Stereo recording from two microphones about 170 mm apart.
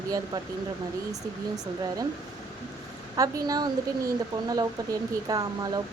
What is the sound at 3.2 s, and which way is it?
A woman's voice, 20° right (ahead or behind).